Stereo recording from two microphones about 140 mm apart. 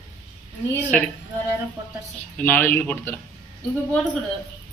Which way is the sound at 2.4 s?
15° left (ahead or behind).